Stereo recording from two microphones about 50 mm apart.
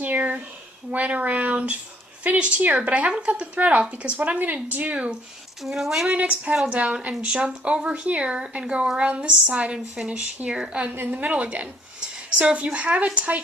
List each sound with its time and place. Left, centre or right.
0.0 s a woman's voice: right
5.6 s speech: centre
6.1 s a woman's voice: right
9.7 s speech: centre
10.1 s a woman's voice: right
11.4 s a sound: right
12.5 s a woman's voice: right